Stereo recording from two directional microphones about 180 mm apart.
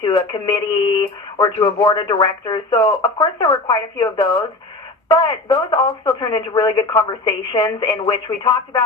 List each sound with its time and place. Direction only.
0.0 s speech: 25° left (ahead or behind)